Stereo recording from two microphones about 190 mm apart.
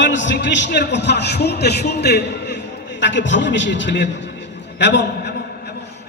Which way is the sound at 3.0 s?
70° left (ahead or behind).